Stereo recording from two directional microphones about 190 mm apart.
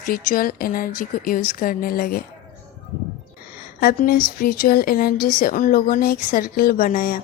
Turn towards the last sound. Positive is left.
turn(degrees=45)  # may be behind; listen again after turning